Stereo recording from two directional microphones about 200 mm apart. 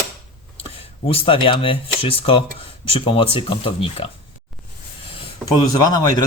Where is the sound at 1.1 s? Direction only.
30° left (ahead or behind).